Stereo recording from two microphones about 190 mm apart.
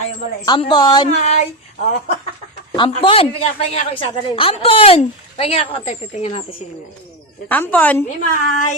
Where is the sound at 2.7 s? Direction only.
30° left (ahead or behind).